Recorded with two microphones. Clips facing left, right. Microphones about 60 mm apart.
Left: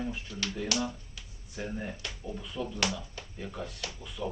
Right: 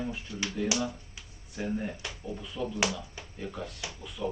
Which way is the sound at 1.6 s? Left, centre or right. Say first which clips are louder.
Right 3 dB; centre.